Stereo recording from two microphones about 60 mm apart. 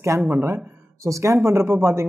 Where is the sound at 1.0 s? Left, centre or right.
Right.